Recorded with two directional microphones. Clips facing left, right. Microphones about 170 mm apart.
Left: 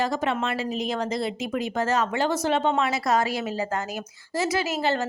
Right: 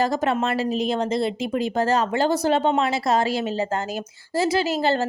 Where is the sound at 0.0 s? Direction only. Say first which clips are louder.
Right 4 dB; 40° right (ahead or behind).